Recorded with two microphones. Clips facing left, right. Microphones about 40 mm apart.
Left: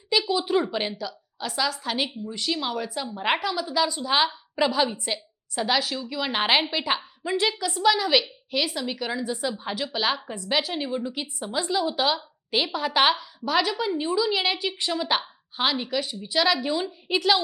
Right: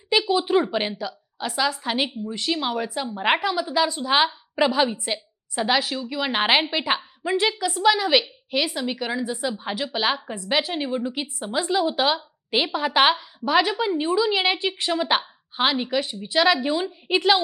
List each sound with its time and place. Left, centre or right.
0.1 s a woman's voice: centre